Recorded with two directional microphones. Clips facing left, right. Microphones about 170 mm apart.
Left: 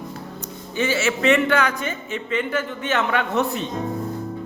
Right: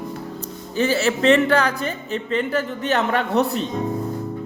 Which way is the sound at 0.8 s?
35° right (ahead or behind).